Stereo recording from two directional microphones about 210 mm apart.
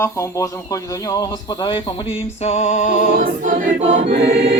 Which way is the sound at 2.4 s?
35° left (ahead or behind).